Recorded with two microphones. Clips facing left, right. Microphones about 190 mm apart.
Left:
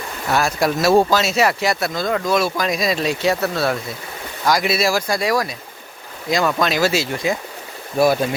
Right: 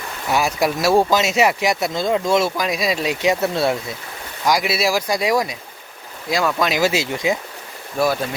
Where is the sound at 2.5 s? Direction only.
10° right (ahead or behind).